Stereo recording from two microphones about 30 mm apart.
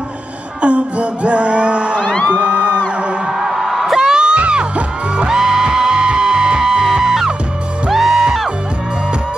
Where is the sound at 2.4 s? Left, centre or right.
Right.